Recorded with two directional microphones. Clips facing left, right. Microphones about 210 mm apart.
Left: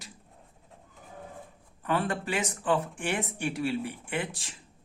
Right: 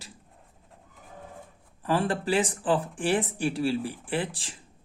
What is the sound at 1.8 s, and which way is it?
Speech, 30° right (ahead or behind).